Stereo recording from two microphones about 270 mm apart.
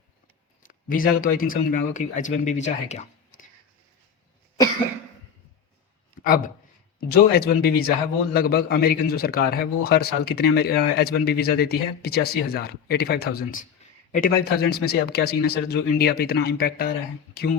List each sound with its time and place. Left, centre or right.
0.7 s speech: left
6.2 s a man's voice: left